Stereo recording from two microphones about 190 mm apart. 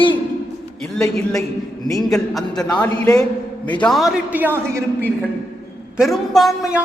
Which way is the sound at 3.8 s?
Centre (ahead or behind).